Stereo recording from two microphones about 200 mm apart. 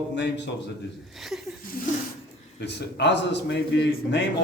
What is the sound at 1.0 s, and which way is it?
Speech, centre (ahead or behind).